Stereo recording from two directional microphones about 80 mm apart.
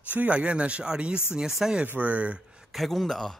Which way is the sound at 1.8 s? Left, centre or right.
Right.